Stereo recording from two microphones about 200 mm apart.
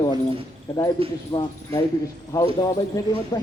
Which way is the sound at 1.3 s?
20° left (ahead or behind).